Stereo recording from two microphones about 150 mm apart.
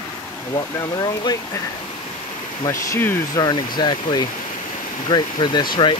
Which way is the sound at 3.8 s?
30° left (ahead or behind).